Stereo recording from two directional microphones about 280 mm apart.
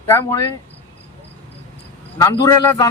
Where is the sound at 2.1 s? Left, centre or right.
Centre.